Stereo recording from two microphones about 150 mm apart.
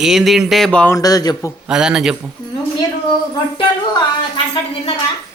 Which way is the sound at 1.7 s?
5° right (ahead or behind).